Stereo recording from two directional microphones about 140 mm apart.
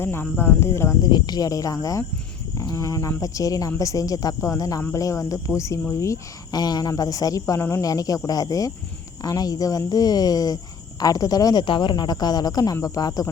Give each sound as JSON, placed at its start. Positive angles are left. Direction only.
{"t": 0.0, "sound": "speech", "side_deg": 15}
{"t": 1.1, "sound": "speech", "side_deg": 30}